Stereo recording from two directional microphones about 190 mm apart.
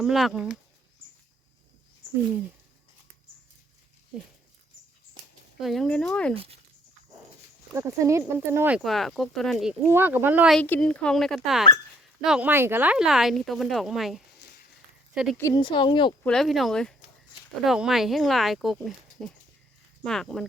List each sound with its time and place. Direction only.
0.0 s speech: centre (ahead or behind)
5.5 s speech: centre (ahead or behind)
6.3 s speech: 30° right (ahead or behind)
7.7 s speech: 15° right (ahead or behind)
9.9 s speech: 10° right (ahead or behind)
10.6 s speech: 5° left (ahead or behind)
15.4 s speech: 20° left (ahead or behind)
16.2 s speech: centre (ahead or behind)